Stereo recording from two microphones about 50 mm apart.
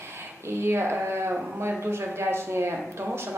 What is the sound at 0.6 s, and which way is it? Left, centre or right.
Speech, right.